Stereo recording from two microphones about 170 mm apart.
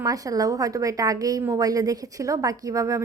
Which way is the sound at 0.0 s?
20° right (ahead or behind).